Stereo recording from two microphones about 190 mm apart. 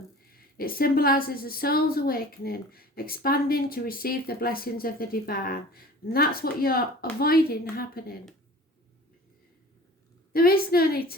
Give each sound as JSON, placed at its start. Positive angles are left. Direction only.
{"t": 0.5, "sound": "a woman's voice", "side_deg": 50}
{"t": 10.3, "sound": "a woman's voice", "side_deg": 50}